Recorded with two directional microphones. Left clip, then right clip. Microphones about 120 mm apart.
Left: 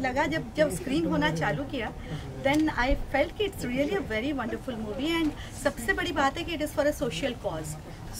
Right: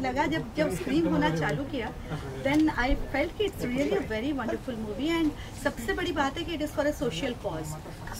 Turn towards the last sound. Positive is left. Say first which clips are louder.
# left 1 dB
turn(degrees=5)  # may be behind; listen again after turning